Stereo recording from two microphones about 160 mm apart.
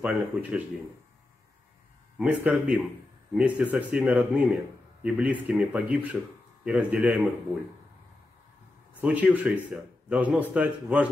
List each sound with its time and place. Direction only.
0.0 s speech: 10° right (ahead or behind)
2.1 s speech: 10° right (ahead or behind)
9.0 s speech: 10° right (ahead or behind)